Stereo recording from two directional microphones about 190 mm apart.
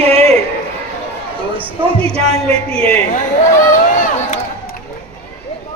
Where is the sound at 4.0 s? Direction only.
35° left (ahead or behind).